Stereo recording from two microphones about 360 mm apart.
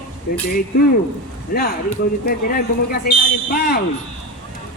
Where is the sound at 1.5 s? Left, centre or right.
Left.